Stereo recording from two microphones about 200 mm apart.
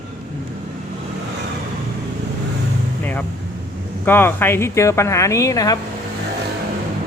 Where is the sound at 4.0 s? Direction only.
10° left (ahead or behind).